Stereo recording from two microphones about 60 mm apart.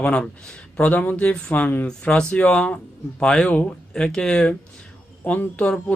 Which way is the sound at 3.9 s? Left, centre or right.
Centre.